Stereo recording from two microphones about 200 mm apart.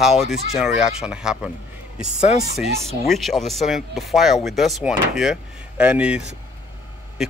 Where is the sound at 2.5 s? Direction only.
Centre (ahead or behind).